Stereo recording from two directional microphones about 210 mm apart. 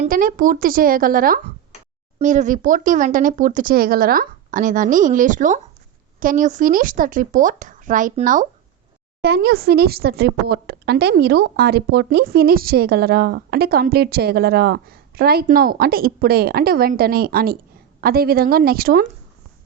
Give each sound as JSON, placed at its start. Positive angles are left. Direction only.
{"t": 0.0, "sound": "a woman's voice", "side_deg": -40}